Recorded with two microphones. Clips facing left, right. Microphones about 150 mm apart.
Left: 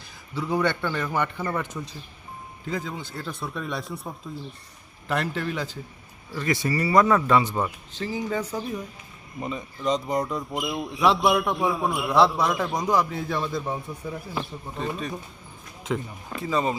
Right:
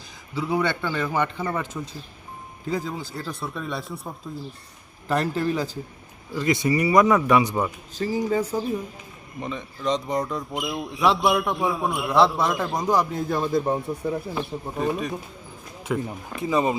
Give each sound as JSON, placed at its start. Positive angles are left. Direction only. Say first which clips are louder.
{"t": 0.3, "sound": "speech", "louder": "right 1 dB", "side_deg": -15}
{"t": 2.8, "sound": "speech", "louder": "right 2 dB", "side_deg": -5}
{"t": 5.0, "sound": "speech", "louder": "right 4 dB", "side_deg": -35}
{"t": 6.3, "sound": "speech", "louder": "right 4 dB", "side_deg": -15}
{"t": 7.9, "sound": "speech", "louder": "right 5 dB", "side_deg": -40}
{"t": 9.4, "sound": "speech", "louder": "even", "side_deg": 5}
{"t": 13.1, "sound": "a man's voice", "louder": "right 4 dB", "side_deg": -45}
{"t": 14.5, "sound": "speech", "louder": "right 7 dB", "side_deg": -30}
{"t": 14.9, "sound": "speech", "louder": "right 3 dB", "side_deg": -5}
{"t": 16.4, "sound": "speech", "louder": "right 3 dB", "side_deg": -15}